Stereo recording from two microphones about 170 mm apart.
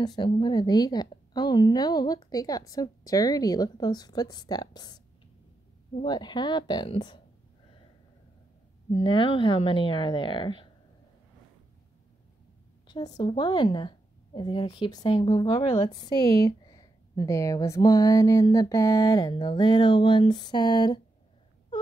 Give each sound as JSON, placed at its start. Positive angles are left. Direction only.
{"t": 0.0, "sound": "a woman's voice", "side_deg": 25}
{"t": 6.0, "sound": "a woman's voice", "side_deg": 25}
{"t": 8.9, "sound": "a woman's voice", "side_deg": 30}
{"t": 12.8, "sound": "a woman's voice", "side_deg": 25}